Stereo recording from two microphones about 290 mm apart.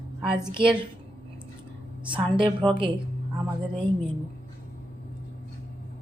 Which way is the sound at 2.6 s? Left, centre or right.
Centre.